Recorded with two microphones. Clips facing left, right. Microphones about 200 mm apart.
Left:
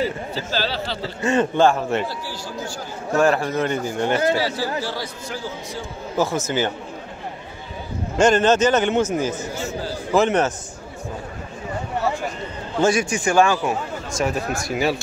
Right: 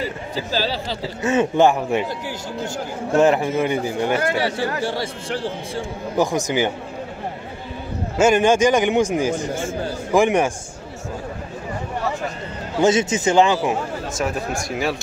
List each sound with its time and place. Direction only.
0.3 s a man's voice: 15° right (ahead or behind)
3.4 s a man's voice: 10° right (ahead or behind)
4.8 s speech: 25° right (ahead or behind)
6.1 s a man's voice: 15° right (ahead or behind)
8.2 s a man's voice: 10° right (ahead or behind)
9.5 s a sound: 50° right (ahead or behind)
10.1 s a man's voice: 10° right (ahead or behind)
12.8 s speech: 20° right (ahead or behind)
14.1 s speech: centre (ahead or behind)